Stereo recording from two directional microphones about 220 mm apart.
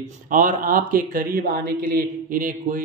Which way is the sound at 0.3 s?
35° right (ahead or behind).